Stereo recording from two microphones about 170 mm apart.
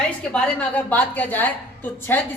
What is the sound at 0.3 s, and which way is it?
A woman's voice, 5° left (ahead or behind).